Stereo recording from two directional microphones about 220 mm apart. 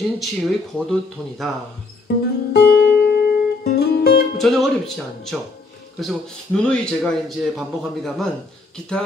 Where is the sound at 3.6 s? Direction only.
45° left (ahead or behind).